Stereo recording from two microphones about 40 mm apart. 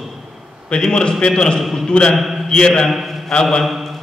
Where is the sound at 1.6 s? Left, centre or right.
Centre.